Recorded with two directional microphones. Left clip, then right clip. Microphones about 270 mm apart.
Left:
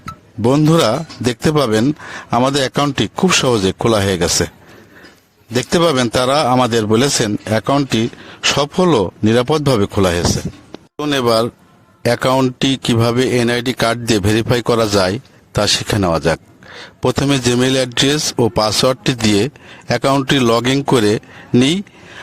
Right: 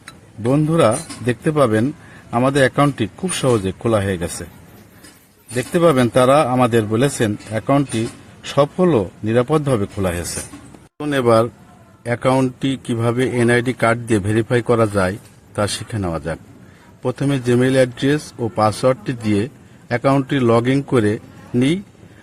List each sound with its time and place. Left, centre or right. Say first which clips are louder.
0.5 s speech: left 2 dB; left
5.7 s speech: even; left